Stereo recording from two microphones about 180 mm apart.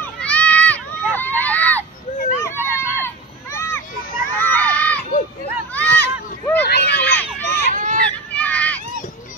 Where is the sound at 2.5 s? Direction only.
10° right (ahead or behind).